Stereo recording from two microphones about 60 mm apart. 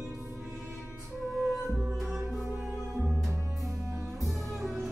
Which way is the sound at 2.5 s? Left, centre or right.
Right.